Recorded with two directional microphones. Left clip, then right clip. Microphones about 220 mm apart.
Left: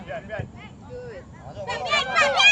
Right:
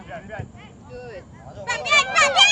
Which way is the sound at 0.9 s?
35° right (ahead or behind).